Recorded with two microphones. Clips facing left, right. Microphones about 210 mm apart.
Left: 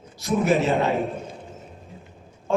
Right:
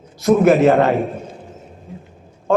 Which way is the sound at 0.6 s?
70° right (ahead or behind).